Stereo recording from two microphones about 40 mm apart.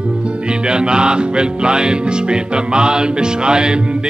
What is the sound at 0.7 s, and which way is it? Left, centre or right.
Music, right.